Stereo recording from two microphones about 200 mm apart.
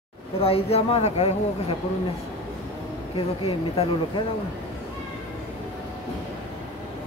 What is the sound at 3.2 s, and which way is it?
Speech, 30° left (ahead or behind).